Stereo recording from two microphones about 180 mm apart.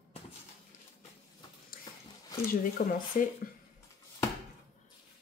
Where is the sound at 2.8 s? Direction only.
50° left (ahead or behind).